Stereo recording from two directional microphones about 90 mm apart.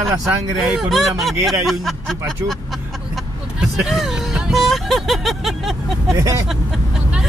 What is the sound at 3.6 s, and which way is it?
Music, 5° right (ahead or behind).